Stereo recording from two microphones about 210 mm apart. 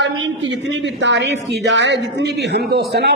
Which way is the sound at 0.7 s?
55° right (ahead or behind).